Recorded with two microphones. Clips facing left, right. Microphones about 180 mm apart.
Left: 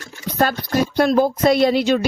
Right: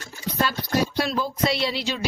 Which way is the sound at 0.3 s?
50° left (ahead or behind).